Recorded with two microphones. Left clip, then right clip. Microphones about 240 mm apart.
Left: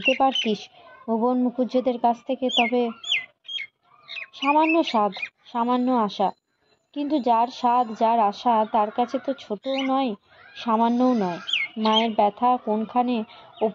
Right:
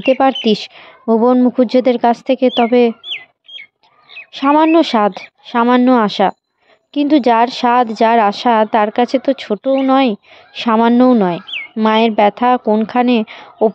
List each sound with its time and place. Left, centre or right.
0.5 s a woman's voice: right
4.3 s a woman's voice: right